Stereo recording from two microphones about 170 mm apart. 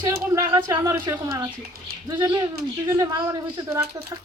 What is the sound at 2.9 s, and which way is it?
Speech, 20° right (ahead or behind).